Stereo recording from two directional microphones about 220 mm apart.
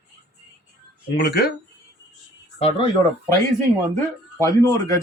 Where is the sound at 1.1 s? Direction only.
50° left (ahead or behind).